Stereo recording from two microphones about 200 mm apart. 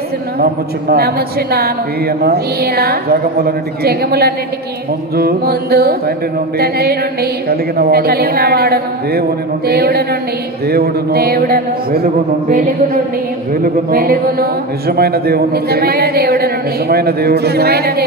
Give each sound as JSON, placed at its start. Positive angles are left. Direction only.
{"t": 0.4, "sound": "speech", "side_deg": -50}
{"t": 13.8, "sound": "speech", "side_deg": -45}